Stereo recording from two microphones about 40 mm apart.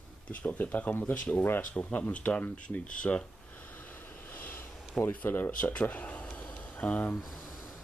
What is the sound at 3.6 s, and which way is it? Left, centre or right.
Snort, left.